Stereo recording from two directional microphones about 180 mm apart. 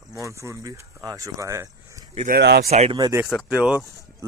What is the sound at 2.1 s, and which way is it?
Speech, 50° right (ahead or behind).